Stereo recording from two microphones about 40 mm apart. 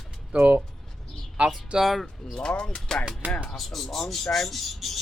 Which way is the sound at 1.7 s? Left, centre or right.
Right.